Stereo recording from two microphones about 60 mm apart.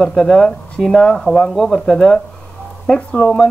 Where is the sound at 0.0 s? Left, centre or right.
Centre.